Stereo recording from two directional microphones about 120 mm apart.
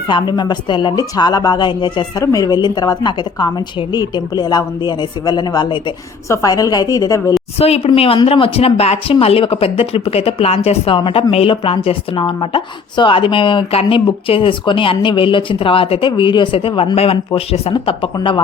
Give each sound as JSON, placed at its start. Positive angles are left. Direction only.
{"t": 0.1, "sound": "a woman's voice", "side_deg": 35}
{"t": 6.2, "sound": "a woman's voice", "side_deg": 25}
{"t": 7.9, "sound": "speech", "side_deg": 50}